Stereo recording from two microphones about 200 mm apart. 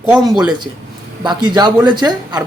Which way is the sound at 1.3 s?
20° right (ahead or behind).